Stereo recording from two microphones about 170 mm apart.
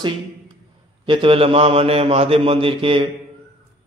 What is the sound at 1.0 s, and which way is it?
A man's voice, 30° right (ahead or behind).